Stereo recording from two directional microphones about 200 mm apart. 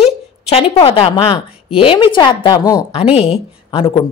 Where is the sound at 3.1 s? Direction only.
30° left (ahead or behind).